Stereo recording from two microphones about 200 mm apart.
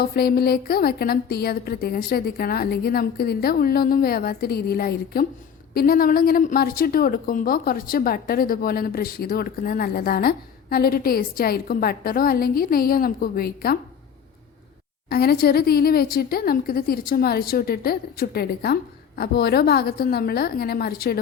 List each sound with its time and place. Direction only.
0.0 s a woman's voice: 50° left (ahead or behind)
15.1 s a woman's voice: 50° left (ahead or behind)